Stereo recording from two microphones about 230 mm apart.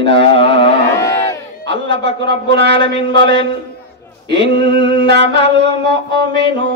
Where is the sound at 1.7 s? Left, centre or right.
Right.